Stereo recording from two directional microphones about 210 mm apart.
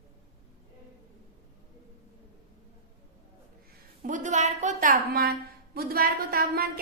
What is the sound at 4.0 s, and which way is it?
A woman's voice, 35° right (ahead or behind).